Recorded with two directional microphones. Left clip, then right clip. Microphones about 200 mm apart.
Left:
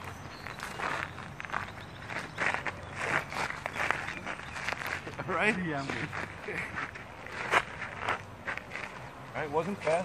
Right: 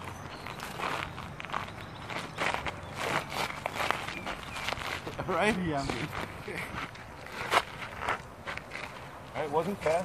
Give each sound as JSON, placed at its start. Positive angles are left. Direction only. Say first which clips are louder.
{"t": 0.7, "sound": "walk", "louder": "even", "side_deg": -15}
{"t": 5.4, "sound": "a man's voice", "louder": "even", "side_deg": -35}
{"t": 7.4, "sound": "a sound", "louder": "even", "side_deg": -25}
{"t": 9.3, "sound": "speech", "louder": "right 1 dB", "side_deg": -25}